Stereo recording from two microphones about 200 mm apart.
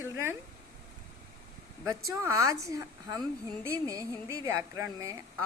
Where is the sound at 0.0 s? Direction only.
10° right (ahead or behind).